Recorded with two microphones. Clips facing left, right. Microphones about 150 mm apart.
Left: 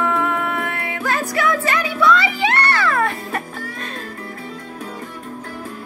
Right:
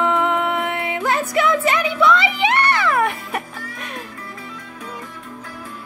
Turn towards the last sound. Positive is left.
turn(degrees=-15)  # may be behind; listen again after turning